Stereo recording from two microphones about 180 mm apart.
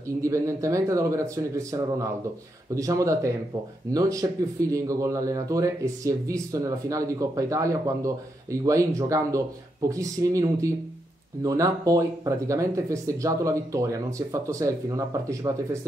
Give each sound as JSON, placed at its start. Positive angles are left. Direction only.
{"t": 0.0, "sound": "speech", "side_deg": -15}